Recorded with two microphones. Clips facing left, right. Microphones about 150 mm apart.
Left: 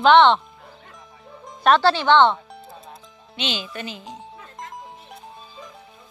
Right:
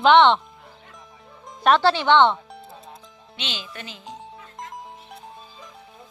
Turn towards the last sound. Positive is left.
turn(degrees=0)  # may be behind; listen again after turning